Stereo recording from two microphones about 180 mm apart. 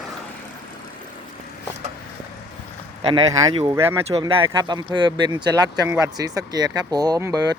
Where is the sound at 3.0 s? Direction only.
25° right (ahead or behind).